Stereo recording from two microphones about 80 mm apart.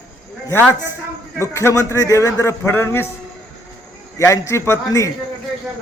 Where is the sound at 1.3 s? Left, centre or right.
Left.